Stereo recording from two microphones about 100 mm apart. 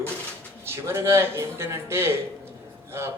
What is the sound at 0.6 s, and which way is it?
A man's voice, 25° right (ahead or behind).